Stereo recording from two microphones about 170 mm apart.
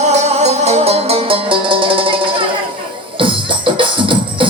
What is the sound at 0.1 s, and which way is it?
Music, 40° right (ahead or behind).